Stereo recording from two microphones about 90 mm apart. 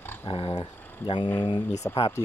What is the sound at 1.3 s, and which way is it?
Speech, 65° left (ahead or behind).